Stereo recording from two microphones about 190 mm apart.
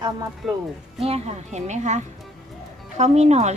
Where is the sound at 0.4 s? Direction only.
Centre (ahead or behind).